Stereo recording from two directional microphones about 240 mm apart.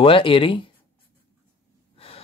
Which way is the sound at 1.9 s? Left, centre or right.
Left.